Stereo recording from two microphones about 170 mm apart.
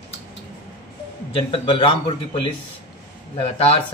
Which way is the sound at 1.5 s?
30° left (ahead or behind).